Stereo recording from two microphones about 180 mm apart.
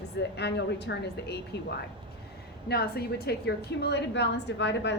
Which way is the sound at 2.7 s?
60° left (ahead or behind).